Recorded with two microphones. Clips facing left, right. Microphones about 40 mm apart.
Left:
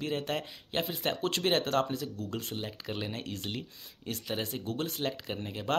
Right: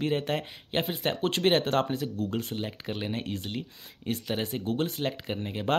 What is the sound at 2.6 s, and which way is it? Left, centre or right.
Speech, centre.